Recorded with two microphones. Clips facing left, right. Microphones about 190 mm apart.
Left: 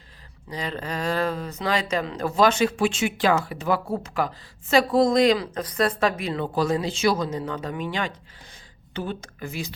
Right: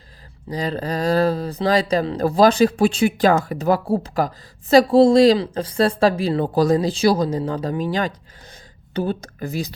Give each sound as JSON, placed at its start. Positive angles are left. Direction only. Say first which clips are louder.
{"t": 0.5, "sound": "speech", "louder": "right 6 dB", "side_deg": -35}